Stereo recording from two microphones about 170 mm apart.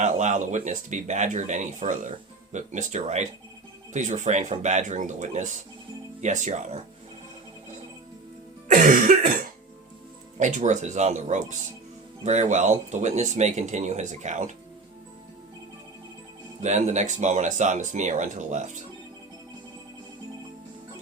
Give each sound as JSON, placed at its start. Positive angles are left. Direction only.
{"t": 0.0, "sound": "speech", "side_deg": -45}
{"t": 8.7, "sound": "throat clearing", "side_deg": -50}
{"t": 10.3, "sound": "speech", "side_deg": -45}
{"t": 16.6, "sound": "speech", "side_deg": -45}